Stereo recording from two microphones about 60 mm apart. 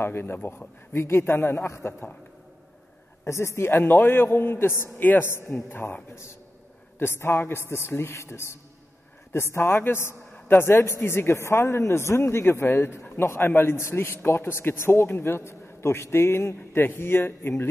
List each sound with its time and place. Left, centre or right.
0.0 s a man's voice: left
3.3 s a man's voice: left
5.0 s a man's voice: left
7.0 s a man's voice: left